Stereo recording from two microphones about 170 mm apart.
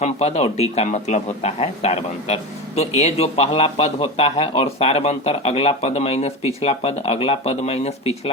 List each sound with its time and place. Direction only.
0.0 s a man's voice: 40° left (ahead or behind)